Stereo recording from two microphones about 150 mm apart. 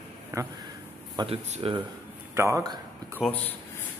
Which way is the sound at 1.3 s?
40° right (ahead or behind).